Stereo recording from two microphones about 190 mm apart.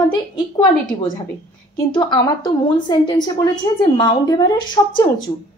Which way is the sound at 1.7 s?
20° left (ahead or behind).